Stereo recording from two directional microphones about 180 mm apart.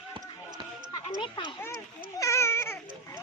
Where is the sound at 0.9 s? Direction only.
25° left (ahead or behind).